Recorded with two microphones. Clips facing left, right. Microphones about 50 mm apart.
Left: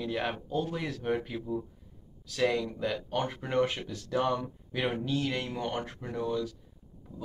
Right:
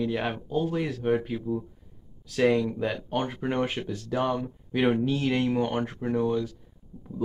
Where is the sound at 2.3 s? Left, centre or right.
Right.